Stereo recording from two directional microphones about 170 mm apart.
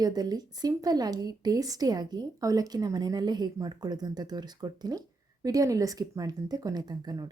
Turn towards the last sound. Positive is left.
turn(degrees=-25)  # may be behind; listen again after turning